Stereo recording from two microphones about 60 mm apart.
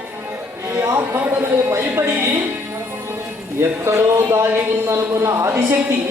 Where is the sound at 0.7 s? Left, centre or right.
Right.